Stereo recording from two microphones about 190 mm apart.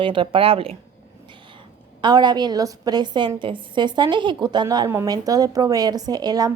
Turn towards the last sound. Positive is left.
turn(degrees=-20)  # may be behind; listen again after turning